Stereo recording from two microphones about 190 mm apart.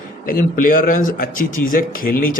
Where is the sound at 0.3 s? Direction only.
45° left (ahead or behind).